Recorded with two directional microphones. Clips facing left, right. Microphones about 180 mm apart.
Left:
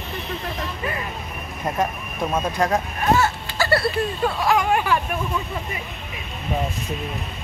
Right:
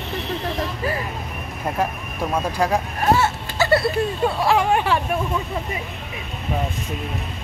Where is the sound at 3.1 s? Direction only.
25° right (ahead or behind).